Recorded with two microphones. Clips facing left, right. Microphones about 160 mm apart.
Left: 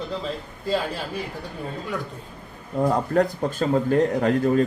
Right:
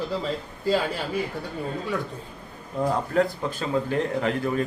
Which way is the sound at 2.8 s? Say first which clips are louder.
Left 3 dB; 45° left (ahead or behind).